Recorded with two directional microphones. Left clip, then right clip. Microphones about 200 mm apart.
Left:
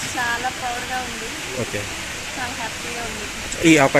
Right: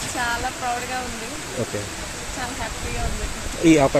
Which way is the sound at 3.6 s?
5° left (ahead or behind).